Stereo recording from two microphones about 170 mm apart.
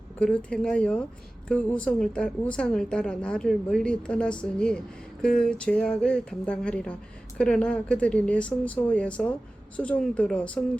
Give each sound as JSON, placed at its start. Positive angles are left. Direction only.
{"t": 0.2, "sound": "a woman's voice", "side_deg": 5}